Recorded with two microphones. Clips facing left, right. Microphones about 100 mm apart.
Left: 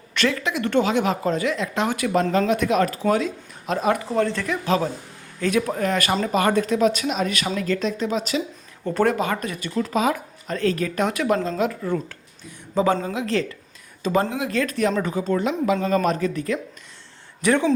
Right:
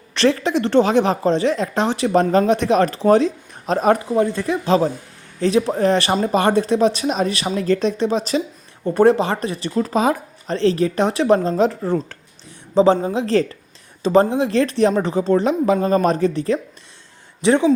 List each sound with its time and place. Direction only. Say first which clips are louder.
0.1 s speech: right 6 dB; 30° right (ahead or behind)
4.1 s speech: right 4 dB; 15° right (ahead or behind); by 8.4 s 35° right (ahead or behind)
8.8 s speech: right 6 dB; 25° right (ahead or behind); by 12.1 s 40° right (ahead or behind)
12.7 s speech: right 6 dB; 25° right (ahead or behind)
13.2 s speech: right 6 dB; 35° right (ahead or behind)